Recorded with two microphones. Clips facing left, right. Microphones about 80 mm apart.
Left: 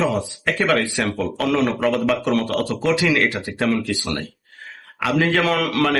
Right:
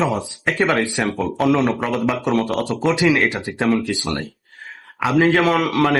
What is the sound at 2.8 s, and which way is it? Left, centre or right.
Speech, right.